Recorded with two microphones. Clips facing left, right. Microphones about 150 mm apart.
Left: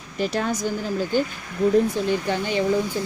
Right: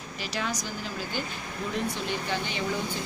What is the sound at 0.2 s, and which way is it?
Speech, 50° left (ahead or behind).